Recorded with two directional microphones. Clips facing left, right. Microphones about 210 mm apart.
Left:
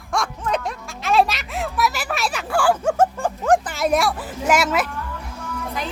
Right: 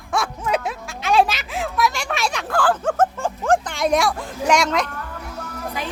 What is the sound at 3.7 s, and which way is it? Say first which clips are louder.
Speech: even; 5° left (ahead or behind).